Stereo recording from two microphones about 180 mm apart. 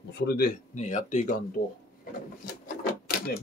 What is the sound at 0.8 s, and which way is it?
Speech, 40° left (ahead or behind).